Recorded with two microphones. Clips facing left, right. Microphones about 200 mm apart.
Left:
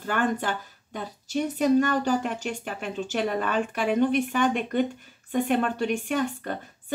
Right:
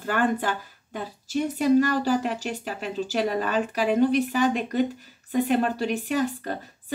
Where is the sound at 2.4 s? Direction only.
40° right (ahead or behind).